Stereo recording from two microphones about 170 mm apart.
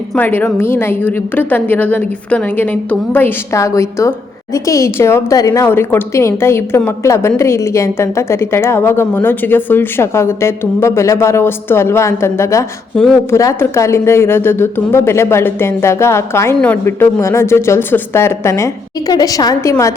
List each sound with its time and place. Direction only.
0.1 s a woman's voice: 10° left (ahead or behind)
12.9 s a woman's voice: 5° left (ahead or behind)
13.3 s a woman's voice: 15° left (ahead or behind)